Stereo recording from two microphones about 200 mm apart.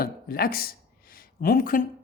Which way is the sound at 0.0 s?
45° left (ahead or behind).